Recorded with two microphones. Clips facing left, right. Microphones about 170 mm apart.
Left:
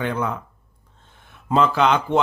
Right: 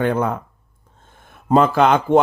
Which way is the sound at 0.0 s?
50° right (ahead or behind).